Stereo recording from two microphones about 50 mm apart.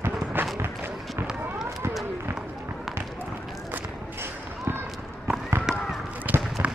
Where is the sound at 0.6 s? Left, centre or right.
Right.